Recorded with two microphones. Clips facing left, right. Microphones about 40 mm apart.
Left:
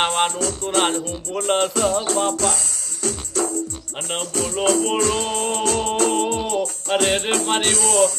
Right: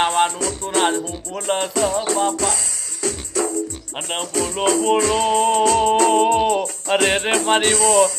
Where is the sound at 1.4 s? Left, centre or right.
Left.